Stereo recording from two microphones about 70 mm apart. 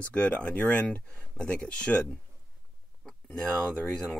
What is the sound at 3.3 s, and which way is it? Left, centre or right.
Speech, centre.